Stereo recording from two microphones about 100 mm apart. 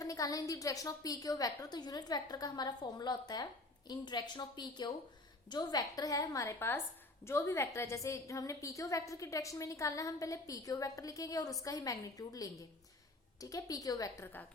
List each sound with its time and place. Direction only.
0.0 s a woman's voice: 35° left (ahead or behind)